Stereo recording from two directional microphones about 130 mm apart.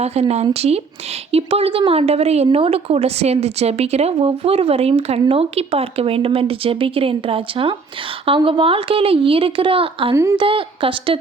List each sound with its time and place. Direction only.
0.0 s a woman's voice: 55° right (ahead or behind)